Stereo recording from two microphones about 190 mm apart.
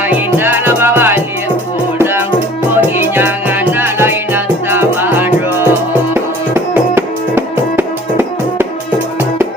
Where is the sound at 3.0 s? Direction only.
10° right (ahead or behind).